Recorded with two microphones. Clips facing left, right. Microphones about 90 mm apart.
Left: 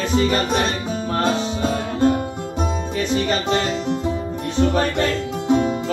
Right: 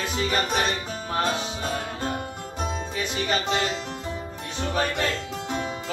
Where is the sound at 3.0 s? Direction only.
10° right (ahead or behind).